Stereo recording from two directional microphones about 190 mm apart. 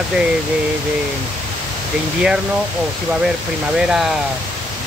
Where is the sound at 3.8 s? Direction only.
Centre (ahead or behind).